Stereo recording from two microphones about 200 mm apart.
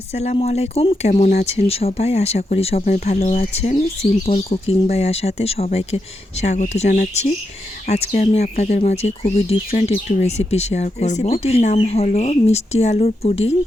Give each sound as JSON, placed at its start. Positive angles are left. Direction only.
{"t": 0.1, "sound": "speech", "side_deg": 35}